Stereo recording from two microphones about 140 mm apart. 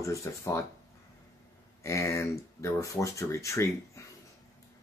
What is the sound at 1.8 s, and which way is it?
Speech, 20° left (ahead or behind).